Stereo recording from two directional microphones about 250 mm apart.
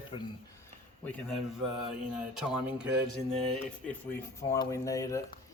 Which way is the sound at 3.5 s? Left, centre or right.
Centre.